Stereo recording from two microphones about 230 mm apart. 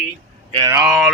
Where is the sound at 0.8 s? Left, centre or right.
Centre.